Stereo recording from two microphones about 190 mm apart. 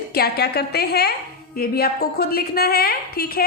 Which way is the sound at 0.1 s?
55° left (ahead or behind).